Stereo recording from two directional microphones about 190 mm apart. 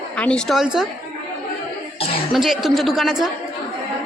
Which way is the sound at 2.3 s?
Centre (ahead or behind).